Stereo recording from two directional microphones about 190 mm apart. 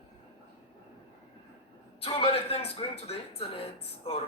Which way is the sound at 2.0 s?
30° left (ahead or behind).